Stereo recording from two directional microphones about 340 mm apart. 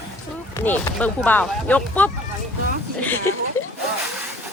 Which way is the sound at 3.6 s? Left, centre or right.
Centre.